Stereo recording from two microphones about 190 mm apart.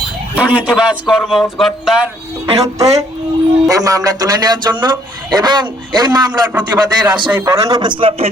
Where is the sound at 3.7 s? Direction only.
20° right (ahead or behind).